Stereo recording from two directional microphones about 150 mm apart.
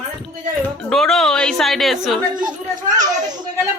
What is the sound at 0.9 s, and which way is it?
Speech, centre (ahead or behind).